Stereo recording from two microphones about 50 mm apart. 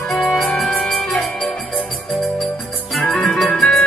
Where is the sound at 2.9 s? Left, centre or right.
Centre.